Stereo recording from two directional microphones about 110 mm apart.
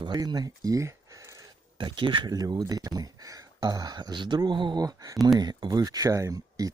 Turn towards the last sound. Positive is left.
turn(degrees=-35)  # may be behind; listen again after turning